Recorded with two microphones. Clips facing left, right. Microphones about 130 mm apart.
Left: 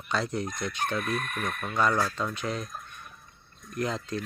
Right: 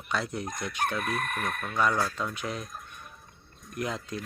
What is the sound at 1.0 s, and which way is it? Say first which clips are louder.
Speech: even; 50° right (ahead or behind).